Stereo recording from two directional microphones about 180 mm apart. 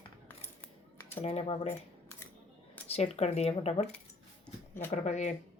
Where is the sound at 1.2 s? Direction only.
35° left (ahead or behind).